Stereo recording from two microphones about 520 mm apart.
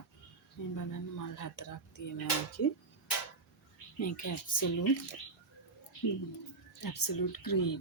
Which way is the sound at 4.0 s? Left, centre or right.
Left.